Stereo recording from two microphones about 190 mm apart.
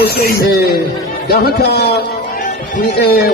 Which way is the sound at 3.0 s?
55° left (ahead or behind).